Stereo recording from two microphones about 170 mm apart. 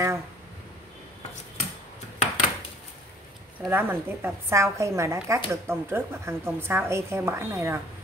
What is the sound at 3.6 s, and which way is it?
A woman's voice, 15° right (ahead or behind).